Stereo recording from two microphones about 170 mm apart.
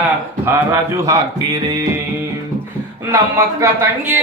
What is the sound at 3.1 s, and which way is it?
Speech, 15° right (ahead or behind).